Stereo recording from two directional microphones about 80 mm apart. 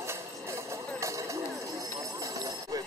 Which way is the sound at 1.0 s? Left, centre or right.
Right.